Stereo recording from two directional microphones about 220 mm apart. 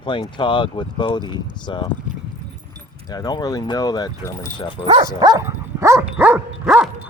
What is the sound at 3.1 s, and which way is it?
Speech, 15° left (ahead or behind).